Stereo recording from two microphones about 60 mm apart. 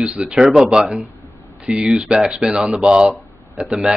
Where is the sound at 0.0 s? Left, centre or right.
Right.